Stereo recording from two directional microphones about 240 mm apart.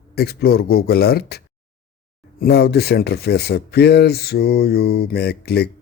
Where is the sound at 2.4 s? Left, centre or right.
Left.